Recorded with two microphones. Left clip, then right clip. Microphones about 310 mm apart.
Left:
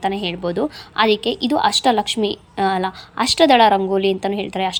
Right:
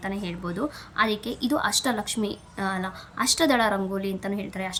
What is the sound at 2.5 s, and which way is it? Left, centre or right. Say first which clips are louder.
A woman's voice: left 11 dB; centre.